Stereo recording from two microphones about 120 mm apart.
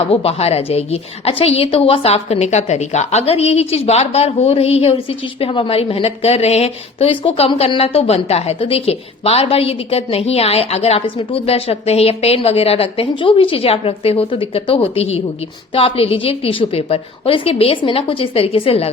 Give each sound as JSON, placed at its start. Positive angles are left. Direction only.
{"t": 0.1, "sound": "a woman's voice", "side_deg": 55}